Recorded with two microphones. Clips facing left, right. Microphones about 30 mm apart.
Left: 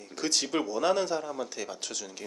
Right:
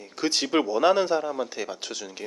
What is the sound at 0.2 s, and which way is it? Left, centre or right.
Speech, right.